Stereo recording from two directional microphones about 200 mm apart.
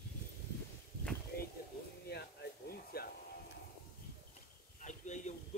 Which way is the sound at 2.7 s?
50° left (ahead or behind).